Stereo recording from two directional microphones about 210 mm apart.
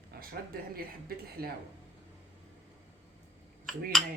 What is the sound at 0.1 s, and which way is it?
Speech, 45° right (ahead or behind).